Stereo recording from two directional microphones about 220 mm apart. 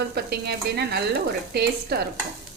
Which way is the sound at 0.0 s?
45° right (ahead or behind).